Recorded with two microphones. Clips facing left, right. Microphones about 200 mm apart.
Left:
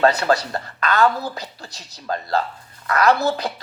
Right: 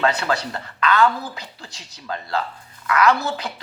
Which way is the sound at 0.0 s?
40° left (ahead or behind).